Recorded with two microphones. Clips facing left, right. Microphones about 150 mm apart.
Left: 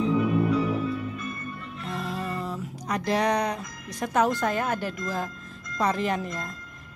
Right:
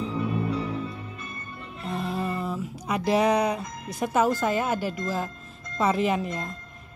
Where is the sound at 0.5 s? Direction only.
30° right (ahead or behind).